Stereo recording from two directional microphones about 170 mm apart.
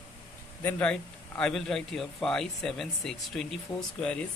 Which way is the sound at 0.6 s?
10° left (ahead or behind).